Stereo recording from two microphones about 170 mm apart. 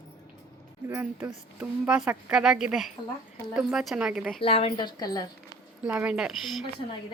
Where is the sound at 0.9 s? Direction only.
10° right (ahead or behind).